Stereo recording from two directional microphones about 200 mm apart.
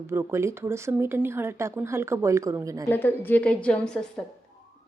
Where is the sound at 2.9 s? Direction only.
10° left (ahead or behind).